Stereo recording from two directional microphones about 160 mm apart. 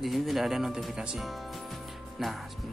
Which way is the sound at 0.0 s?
Centre (ahead or behind).